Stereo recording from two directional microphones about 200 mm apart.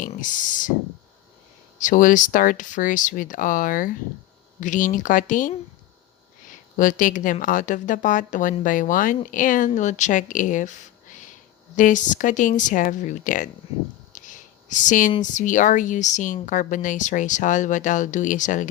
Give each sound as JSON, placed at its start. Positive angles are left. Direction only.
{"t": 0.0, "sound": "speech", "side_deg": 40}
{"t": 1.8, "sound": "a woman's voice", "side_deg": 40}
{"t": 6.7, "sound": "a woman's voice", "side_deg": 40}
{"t": 14.1, "sound": "a sound", "side_deg": 40}
{"t": 15.2, "sound": "a woman's voice", "side_deg": 40}